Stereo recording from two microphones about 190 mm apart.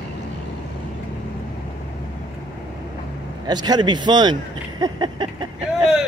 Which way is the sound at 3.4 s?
20° right (ahead or behind).